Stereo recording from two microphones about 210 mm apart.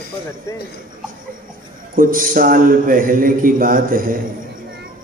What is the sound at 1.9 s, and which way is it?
A man's voice, 40° right (ahead or behind).